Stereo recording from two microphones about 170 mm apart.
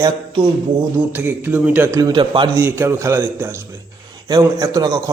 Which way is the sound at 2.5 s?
15° right (ahead or behind).